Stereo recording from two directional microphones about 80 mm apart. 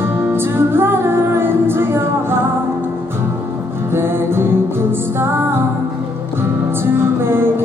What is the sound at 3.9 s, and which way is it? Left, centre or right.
Music, right.